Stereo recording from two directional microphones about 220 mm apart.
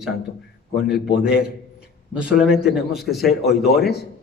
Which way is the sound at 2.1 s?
5° right (ahead or behind).